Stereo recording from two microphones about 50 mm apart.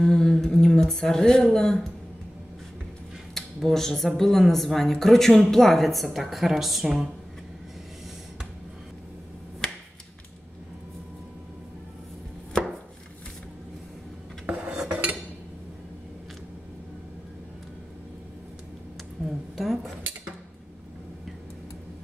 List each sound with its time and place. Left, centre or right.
0.0 s speech: centre
3.6 s speech: centre
9.6 s finger snapping: centre
14.4 s cutlery: right
19.2 s a sound: centre